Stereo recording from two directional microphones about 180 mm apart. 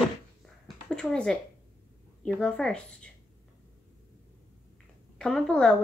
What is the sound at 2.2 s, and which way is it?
Speech, 5° left (ahead or behind).